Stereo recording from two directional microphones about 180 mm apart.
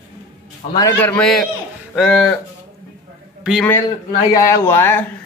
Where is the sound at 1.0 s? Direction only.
5° left (ahead or behind).